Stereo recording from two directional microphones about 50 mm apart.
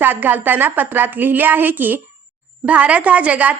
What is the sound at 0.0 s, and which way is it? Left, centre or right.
A woman's voice, right.